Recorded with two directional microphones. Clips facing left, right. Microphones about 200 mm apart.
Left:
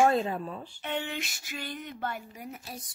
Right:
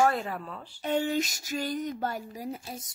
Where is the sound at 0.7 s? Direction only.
40° right (ahead or behind).